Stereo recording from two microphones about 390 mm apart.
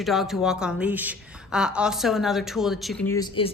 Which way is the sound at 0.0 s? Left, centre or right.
Centre.